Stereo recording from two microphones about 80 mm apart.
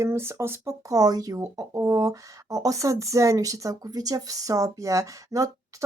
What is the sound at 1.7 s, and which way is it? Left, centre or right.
Speech, right.